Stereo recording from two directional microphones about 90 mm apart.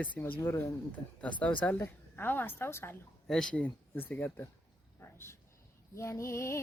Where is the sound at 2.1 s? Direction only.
20° left (ahead or behind).